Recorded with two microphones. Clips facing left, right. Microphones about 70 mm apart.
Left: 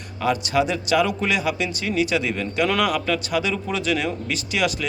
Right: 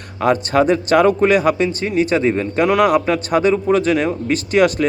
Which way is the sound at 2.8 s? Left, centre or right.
Right.